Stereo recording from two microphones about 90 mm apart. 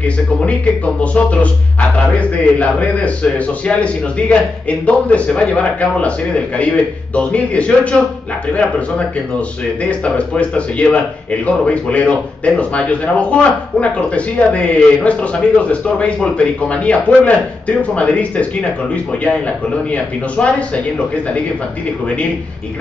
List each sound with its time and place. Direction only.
0.0 s speech: 15° left (ahead or behind)